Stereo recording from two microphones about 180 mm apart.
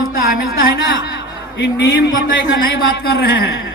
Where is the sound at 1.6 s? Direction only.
90° left.